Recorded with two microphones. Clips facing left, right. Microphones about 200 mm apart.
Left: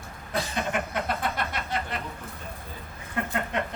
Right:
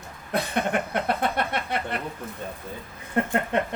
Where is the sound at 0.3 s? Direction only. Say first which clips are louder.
Right 4 dB; 60° right (ahead or behind).